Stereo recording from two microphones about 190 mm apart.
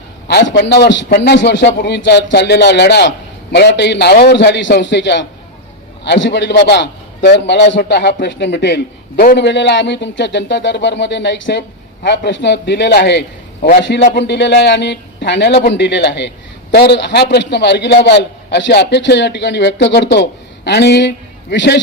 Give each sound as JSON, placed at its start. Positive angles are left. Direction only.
{"t": 0.3, "sound": "a man's voice", "side_deg": 60}
{"t": 13.6, "sound": "a man's voice", "side_deg": 45}
{"t": 13.8, "sound": "a man's voice", "side_deg": 60}